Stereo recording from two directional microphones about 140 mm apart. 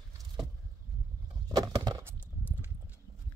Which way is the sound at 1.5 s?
25° right (ahead or behind).